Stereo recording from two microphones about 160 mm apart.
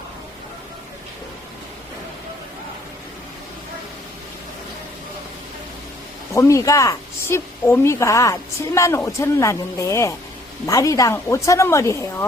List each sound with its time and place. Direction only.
6.3 s a woman's voice: 20° left (ahead or behind)